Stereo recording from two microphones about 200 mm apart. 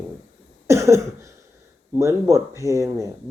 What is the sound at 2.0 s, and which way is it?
Speech, 15° right (ahead or behind).